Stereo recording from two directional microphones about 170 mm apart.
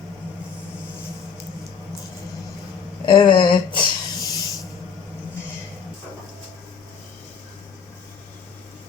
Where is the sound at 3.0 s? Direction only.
25° left (ahead or behind).